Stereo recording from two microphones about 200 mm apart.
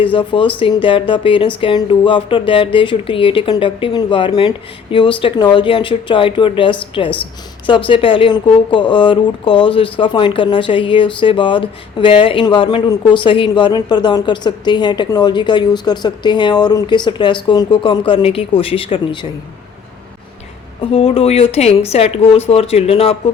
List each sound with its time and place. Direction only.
0.0 s speech: 25° left (ahead or behind)
20.9 s speech: 30° left (ahead or behind)